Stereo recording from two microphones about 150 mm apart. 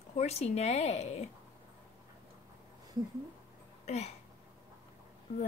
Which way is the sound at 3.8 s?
45° left (ahead or behind).